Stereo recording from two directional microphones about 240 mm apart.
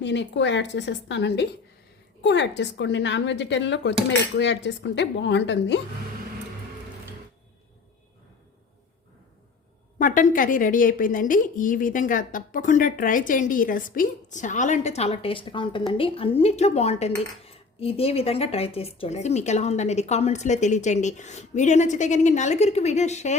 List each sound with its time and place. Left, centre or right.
0.0 s speech: left
10.0 s a woman's voice: left